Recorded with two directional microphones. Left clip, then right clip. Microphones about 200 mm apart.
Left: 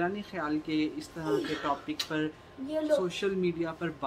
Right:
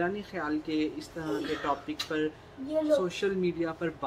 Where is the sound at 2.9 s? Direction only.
5° left (ahead or behind).